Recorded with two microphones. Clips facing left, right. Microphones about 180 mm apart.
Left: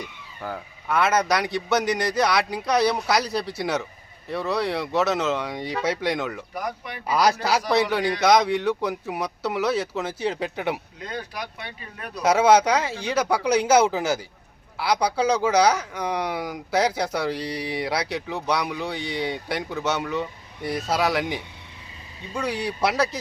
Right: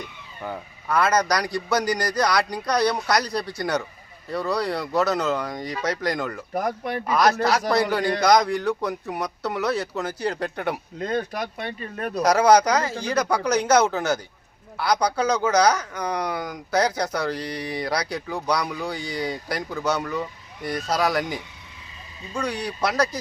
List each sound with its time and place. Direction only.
0.4 s a man's voice: centre (ahead or behind)
6.5 s speech: 50° right (ahead or behind)
7.1 s a man's voice: 10° left (ahead or behind)
11.0 s speech: 45° right (ahead or behind)
12.2 s a man's voice: 5° left (ahead or behind)